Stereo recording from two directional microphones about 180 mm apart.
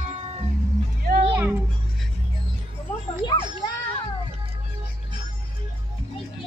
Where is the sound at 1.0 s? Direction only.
55° right (ahead or behind).